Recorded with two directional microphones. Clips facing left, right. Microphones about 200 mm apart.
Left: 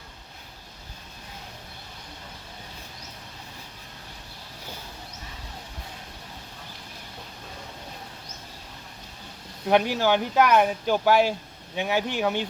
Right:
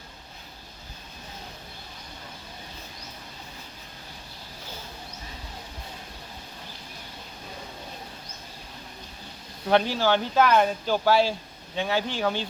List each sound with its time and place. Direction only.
9.6 s speech: 15° left (ahead or behind)